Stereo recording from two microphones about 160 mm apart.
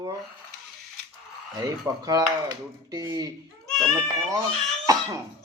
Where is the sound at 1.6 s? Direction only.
25° right (ahead or behind).